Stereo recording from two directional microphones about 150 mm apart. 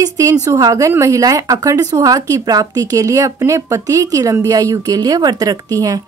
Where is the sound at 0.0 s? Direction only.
20° right (ahead or behind).